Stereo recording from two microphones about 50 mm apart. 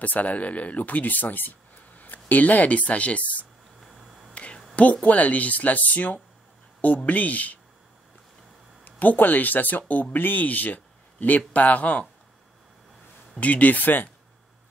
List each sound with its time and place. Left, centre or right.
0.0 s speech: left
4.3 s a sound: left
4.7 s a man's voice: left
8.8 s a man's voice: left
13.4 s a man's voice: left